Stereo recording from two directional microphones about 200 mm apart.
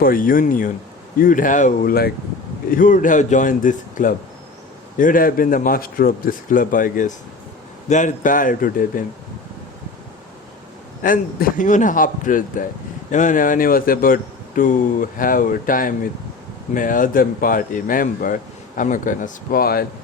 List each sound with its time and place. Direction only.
0.0 s a man's voice: 45° left (ahead or behind)
11.0 s a man's voice: 45° left (ahead or behind)